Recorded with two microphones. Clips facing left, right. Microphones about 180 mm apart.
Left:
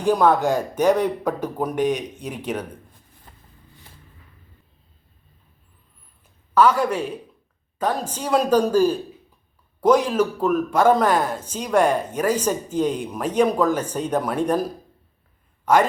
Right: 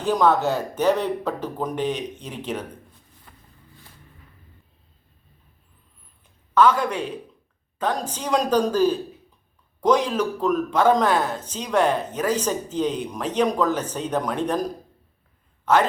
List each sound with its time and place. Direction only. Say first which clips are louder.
0.0 s speech: left 2 dB; 10° left (ahead or behind)
3.3 s a sound: left 1 dB; 30° left (ahead or behind)
6.5 s speech: left 1 dB; 10° left (ahead or behind)
15.6 s a man's voice: left 2 dB; 10° left (ahead or behind)